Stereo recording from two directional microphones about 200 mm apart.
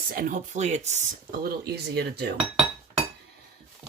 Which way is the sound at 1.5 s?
55° right (ahead or behind).